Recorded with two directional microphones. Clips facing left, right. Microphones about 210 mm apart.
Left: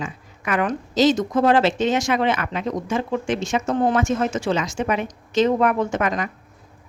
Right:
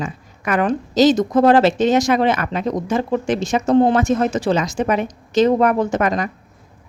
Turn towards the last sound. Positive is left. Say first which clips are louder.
# right 4 dB
turn(degrees=-40)  # may be behind; listen again after turning